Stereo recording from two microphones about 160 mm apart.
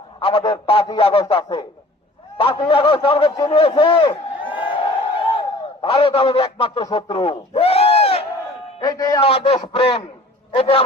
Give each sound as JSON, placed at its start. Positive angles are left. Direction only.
{"t": 0.2, "sound": "a man's voice", "side_deg": 35}
{"t": 6.9, "sound": "a sound", "side_deg": 35}
{"t": 8.8, "sound": "speech", "side_deg": 25}
{"t": 9.2, "sound": "a man's voice", "side_deg": 35}